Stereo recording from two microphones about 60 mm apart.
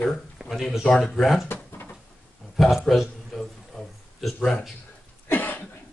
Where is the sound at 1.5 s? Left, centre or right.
Left.